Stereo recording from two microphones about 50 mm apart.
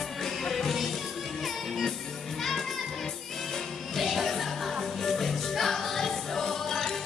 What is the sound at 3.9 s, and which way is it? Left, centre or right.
Music, centre.